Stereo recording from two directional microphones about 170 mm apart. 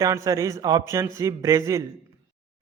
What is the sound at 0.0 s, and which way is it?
A man's voice, 20° right (ahead or behind).